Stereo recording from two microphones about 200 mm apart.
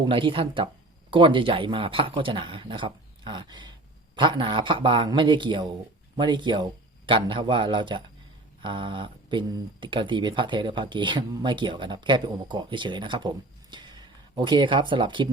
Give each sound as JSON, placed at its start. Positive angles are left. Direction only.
{"t": 0.0, "sound": "speech", "side_deg": -25}